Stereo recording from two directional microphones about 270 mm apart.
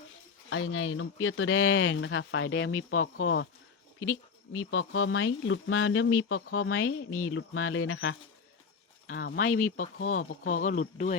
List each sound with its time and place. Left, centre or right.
0.5 s speech: left
4.5 s speech: left
9.3 s speech: left
10.6 s speech: left